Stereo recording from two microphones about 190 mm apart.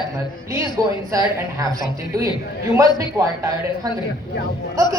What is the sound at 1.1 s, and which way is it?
Music, 15° right (ahead or behind).